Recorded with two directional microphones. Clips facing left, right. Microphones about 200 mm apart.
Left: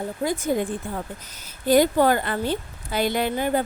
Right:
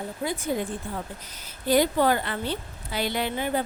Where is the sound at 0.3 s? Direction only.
45° left (ahead or behind).